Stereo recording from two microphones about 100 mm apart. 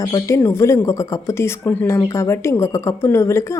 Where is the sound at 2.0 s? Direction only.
30° left (ahead or behind).